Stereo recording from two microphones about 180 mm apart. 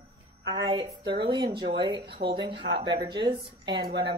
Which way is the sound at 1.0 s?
65° right (ahead or behind).